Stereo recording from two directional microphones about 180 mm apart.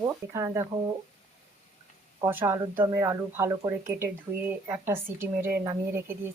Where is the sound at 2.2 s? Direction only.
10° right (ahead or behind).